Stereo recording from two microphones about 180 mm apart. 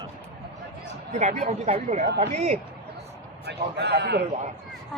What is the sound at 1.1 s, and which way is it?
Speech, 40° right (ahead or behind).